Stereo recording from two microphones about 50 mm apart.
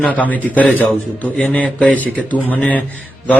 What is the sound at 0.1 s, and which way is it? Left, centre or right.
A man's voice, left.